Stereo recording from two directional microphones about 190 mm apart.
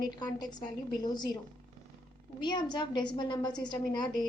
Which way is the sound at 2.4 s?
25° left (ahead or behind).